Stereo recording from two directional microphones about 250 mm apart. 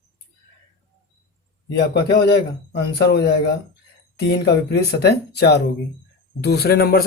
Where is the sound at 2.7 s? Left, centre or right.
Left.